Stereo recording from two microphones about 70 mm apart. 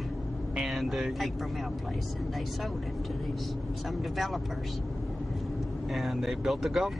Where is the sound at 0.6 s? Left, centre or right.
Centre.